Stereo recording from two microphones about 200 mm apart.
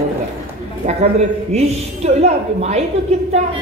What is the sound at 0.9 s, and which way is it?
A woman's voice, 30° right (ahead or behind).